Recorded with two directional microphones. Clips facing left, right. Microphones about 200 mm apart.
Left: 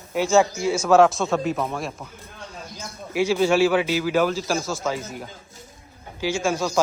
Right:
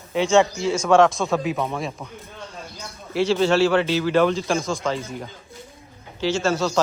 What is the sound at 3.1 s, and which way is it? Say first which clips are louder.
A man's voice: even; 10° left (ahead or behind).